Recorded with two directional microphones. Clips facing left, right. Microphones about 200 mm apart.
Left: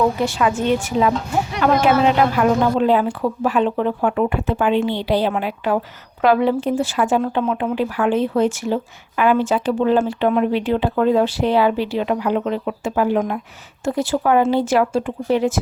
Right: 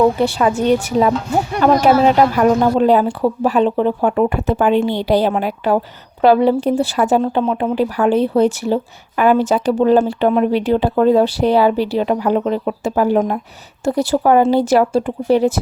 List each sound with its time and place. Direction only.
0.2 s speech: 35° right (ahead or behind)